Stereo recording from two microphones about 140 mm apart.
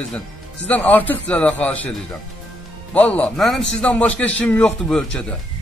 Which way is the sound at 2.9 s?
10° left (ahead or behind).